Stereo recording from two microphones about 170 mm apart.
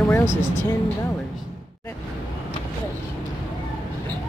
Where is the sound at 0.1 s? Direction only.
15° left (ahead or behind).